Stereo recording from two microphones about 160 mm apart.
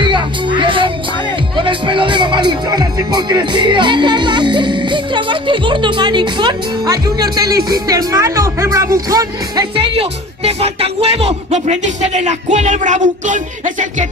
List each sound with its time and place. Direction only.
0.0 s music: 30° right (ahead or behind)
1.6 s speech: 30° right (ahead or behind); by 14.0 s 50° right (ahead or behind)